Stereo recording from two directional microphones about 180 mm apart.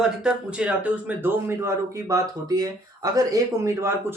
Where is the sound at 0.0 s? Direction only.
5° right (ahead or behind).